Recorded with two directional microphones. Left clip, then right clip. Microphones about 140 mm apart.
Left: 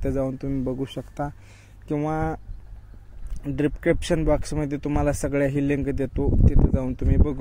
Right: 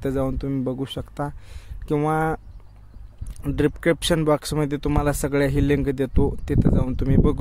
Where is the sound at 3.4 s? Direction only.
35° right (ahead or behind).